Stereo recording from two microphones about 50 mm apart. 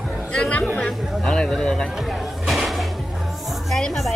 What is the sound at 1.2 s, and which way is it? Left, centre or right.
Speech, centre.